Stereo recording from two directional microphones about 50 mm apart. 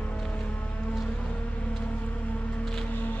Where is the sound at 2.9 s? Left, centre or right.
Left.